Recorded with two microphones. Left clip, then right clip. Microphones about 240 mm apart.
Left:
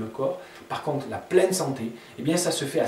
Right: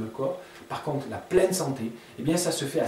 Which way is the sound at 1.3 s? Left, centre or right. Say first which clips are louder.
Left 2 dB; centre.